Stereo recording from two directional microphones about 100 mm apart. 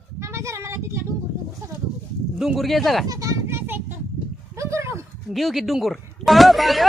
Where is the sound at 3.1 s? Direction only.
35° right (ahead or behind).